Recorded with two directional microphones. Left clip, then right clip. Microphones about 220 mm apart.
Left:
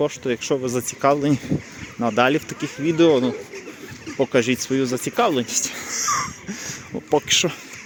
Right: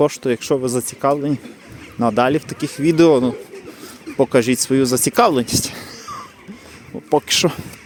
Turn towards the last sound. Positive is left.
turn(degrees=-30)  # may be behind; listen again after turning